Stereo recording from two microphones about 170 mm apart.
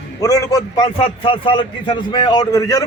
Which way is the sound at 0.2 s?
20° left (ahead or behind).